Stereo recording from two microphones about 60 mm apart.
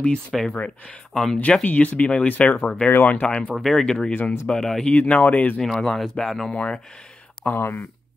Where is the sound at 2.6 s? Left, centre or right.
Centre.